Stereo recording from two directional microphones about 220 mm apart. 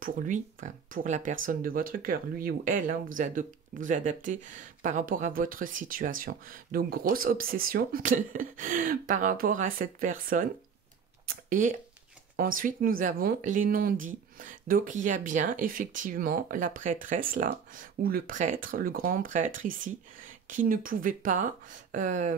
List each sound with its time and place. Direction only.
0.0 s speech: 40° right (ahead or behind)